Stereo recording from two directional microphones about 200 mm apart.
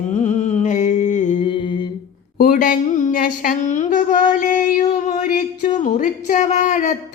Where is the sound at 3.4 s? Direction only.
40° left (ahead or behind).